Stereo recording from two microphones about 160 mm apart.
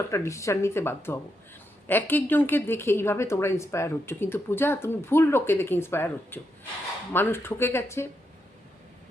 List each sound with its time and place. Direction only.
0.1 s speech: 20° left (ahead or behind)